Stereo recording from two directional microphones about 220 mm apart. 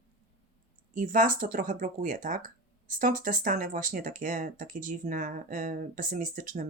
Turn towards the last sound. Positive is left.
turn(degrees=-35)  # may be behind; listen again after turning